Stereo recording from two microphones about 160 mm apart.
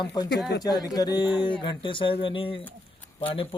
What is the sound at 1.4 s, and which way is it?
Mantra, 30° left (ahead or behind).